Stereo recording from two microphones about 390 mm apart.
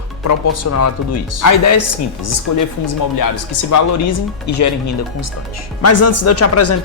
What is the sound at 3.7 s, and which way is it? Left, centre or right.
Speech, left.